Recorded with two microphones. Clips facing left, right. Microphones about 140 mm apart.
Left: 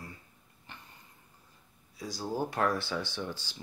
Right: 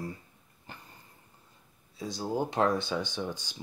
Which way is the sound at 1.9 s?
25° right (ahead or behind).